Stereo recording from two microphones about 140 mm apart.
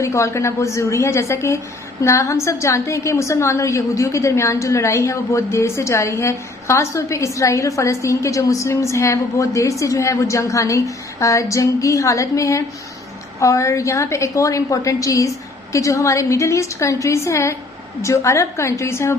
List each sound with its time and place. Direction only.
0.0 s a woman's voice: 20° left (ahead or behind)